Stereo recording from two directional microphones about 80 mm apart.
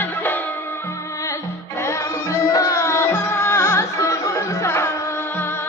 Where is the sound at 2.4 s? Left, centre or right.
Left.